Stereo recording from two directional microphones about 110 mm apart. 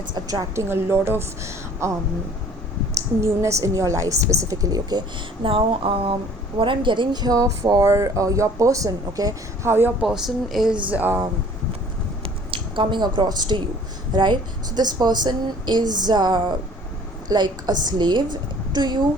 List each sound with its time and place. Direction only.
0.1 s speech: 35° right (ahead or behind)
0.7 s a woman's voice: 20° right (ahead or behind)
3.2 s speech: 25° right (ahead or behind)
10.0 s speech: 5° right (ahead or behind)
12.5 s a woman's voice: 55° right (ahead or behind)